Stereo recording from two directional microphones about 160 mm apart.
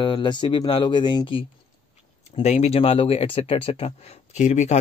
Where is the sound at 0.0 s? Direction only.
30° left (ahead or behind).